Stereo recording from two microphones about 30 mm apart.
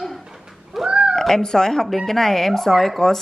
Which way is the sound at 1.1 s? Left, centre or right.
Centre.